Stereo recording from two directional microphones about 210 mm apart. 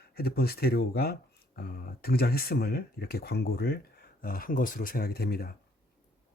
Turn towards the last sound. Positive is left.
turn(degrees=45)  # may be behind; listen again after turning